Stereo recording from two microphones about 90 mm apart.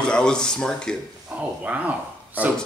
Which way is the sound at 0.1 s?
10° left (ahead or behind).